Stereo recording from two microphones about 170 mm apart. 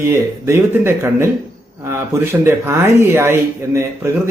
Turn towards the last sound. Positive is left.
turn(degrees=-15)  # may be behind; listen again after turning